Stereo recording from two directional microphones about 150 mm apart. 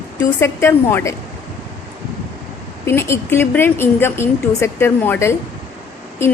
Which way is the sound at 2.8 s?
15° left (ahead or behind).